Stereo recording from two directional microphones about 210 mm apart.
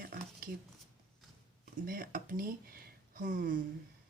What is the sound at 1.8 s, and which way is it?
Speech, 40° right (ahead or behind).